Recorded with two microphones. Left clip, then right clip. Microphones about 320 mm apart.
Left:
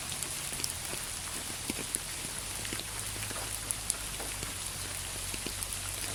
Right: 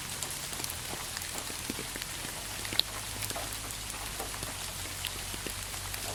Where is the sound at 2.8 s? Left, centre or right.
Right.